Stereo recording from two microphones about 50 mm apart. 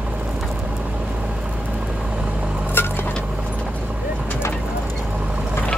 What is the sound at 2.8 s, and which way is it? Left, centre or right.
Squish, left.